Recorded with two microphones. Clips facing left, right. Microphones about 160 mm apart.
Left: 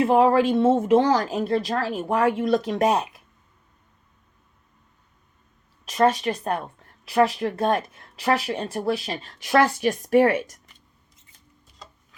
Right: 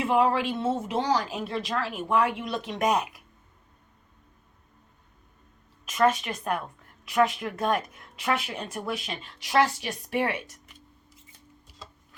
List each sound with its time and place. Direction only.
0.0 s a woman's voice: 40° left (ahead or behind)
5.8 s a woman's voice: 35° left (ahead or behind)
9.4 s a woman's voice: 50° left (ahead or behind)